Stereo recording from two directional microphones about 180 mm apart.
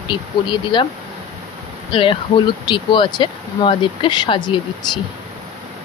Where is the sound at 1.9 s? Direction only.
30° left (ahead or behind).